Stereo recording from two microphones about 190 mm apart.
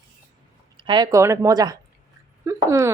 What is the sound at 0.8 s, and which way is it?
Speech, 25° right (ahead or behind).